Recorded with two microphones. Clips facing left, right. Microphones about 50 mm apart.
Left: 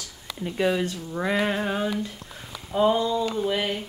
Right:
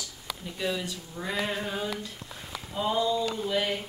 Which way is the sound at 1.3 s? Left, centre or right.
Left.